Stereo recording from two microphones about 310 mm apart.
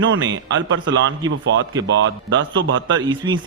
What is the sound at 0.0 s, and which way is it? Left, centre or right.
A man's voice, right.